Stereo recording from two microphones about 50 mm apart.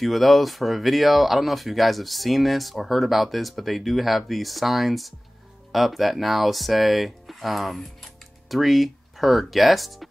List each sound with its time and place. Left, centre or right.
0.0 s speech: centre